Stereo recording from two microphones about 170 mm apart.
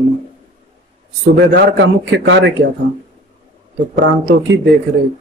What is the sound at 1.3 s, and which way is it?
A man's voice, 90° right.